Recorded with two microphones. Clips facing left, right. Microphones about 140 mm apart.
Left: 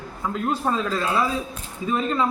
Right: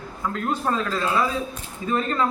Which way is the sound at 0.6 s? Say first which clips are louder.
Even; 5° left (ahead or behind).